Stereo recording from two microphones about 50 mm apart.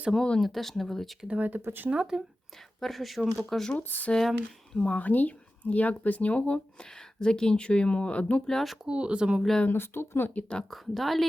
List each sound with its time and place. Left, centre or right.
0.2 s speech: centre
1.3 s speech: right
1.9 s speech: centre
2.8 s speech: centre
3.8 s speech: left
4.2 s speech: centre
4.9 s speech: left
8.4 s speech: centre
8.9 s speech: right
9.6 s speech: left
10.7 s speech: centre